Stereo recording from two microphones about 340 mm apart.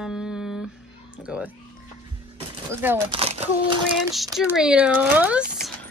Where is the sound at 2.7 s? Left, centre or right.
Centre.